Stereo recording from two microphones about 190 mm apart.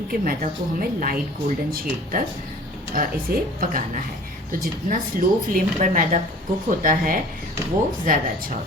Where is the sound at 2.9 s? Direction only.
45° right (ahead or behind).